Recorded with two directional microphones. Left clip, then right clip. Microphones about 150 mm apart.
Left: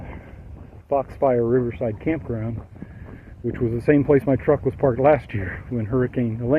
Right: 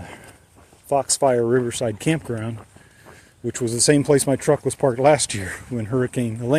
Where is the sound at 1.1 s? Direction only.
40° right (ahead or behind).